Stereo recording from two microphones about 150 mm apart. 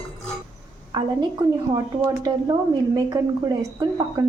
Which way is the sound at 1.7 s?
20° right (ahead or behind).